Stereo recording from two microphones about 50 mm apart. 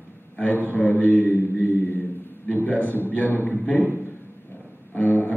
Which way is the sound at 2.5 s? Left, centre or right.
Left.